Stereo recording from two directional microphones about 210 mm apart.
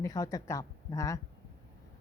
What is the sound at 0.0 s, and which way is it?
A woman's voice, 15° left (ahead or behind).